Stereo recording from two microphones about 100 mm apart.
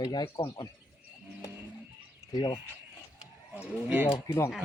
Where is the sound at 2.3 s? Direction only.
40° left (ahead or behind).